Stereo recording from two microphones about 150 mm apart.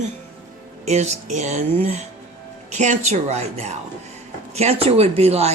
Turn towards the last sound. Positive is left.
turn(degrees=-45)  # may be behind; listen again after turning